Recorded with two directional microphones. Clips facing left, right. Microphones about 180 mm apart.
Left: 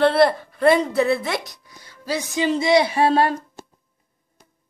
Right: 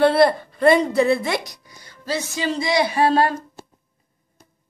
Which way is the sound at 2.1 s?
20° left (ahead or behind).